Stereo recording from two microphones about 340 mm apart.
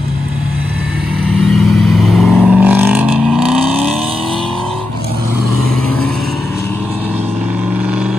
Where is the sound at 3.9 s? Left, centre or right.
Centre.